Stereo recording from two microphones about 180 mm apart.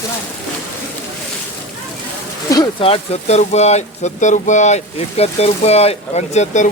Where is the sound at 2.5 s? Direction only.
20° left (ahead or behind).